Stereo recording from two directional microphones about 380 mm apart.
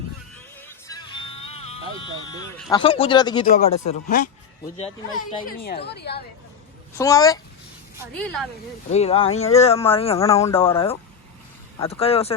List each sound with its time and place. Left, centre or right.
0.9 s music: centre
1.6 s a sound: centre
2.6 s speech: centre; by 6.2 s left
6.9 s speech: centre
8.9 s speech: centre